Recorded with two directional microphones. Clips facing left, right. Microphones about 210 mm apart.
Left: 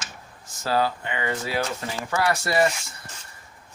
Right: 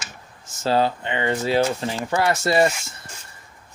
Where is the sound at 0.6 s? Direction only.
25° right (ahead or behind).